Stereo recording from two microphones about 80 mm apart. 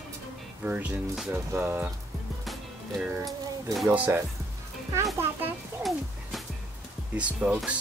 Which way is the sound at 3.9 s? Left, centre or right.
Right.